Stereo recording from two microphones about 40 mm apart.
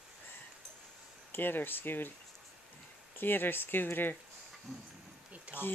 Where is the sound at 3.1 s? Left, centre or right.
Left.